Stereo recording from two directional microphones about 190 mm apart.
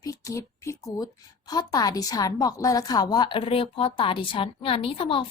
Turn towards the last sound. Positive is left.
turn(degrees=30)  # may be behind; listen again after turning